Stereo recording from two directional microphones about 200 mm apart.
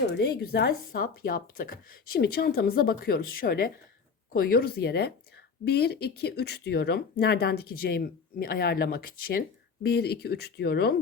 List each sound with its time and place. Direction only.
0.1 s speech: 55° left (ahead or behind)